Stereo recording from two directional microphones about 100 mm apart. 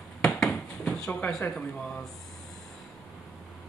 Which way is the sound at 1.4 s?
10° left (ahead or behind).